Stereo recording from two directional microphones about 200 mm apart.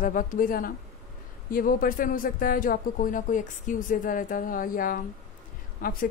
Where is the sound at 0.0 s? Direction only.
40° left (ahead or behind).